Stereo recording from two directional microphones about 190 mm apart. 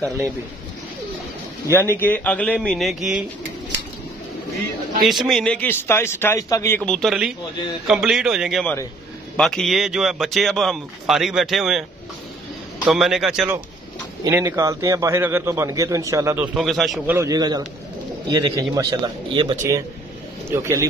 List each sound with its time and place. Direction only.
1.7 s a man's voice: 10° left (ahead or behind)
5.0 s a man's voice: centre (ahead or behind)
12.8 s speech: centre (ahead or behind)
14.2 s a man's voice: 15° right (ahead or behind)
16.5 s speech: centre (ahead or behind)
17.0 s a man's voice: 15° right (ahead or behind)